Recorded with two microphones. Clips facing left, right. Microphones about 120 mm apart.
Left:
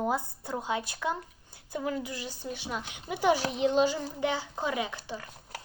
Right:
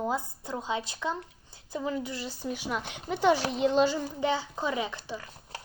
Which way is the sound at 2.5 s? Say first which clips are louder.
Right 3 dB; 55° right (ahead or behind).